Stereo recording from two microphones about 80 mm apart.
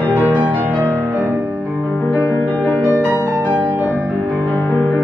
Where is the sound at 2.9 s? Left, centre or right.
Right.